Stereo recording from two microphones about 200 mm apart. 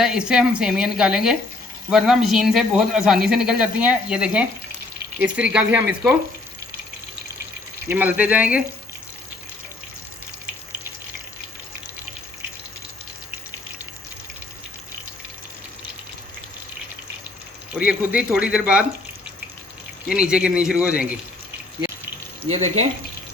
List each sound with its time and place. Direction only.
0.0 s speech: 5° right (ahead or behind)
7.9 s speech: 10° right (ahead or behind)
17.7 s speech: 5° right (ahead or behind)
20.1 s speech: 5° right (ahead or behind)
22.4 s speech: 30° right (ahead or behind)